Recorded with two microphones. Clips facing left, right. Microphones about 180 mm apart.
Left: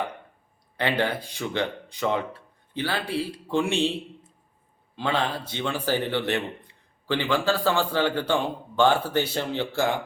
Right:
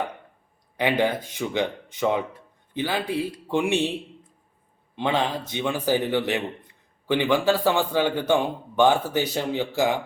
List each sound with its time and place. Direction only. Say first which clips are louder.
0.8 s a man's voice: right 3 dB; 15° right (ahead or behind)
4.9 s a man's voice: right 2 dB; 20° right (ahead or behind)